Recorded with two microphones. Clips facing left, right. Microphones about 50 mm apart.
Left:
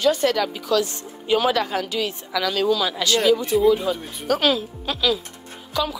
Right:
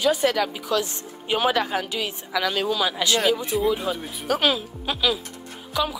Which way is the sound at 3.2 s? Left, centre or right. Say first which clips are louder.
Left 7 dB; centre.